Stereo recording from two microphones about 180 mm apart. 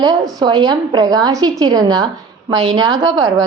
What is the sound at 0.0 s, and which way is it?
A woman's voice, 20° right (ahead or behind).